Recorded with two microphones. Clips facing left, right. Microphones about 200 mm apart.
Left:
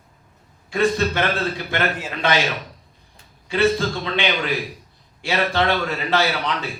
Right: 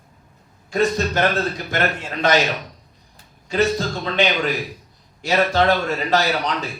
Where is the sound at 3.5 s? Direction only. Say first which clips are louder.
Left 1 dB; 40° right (ahead or behind).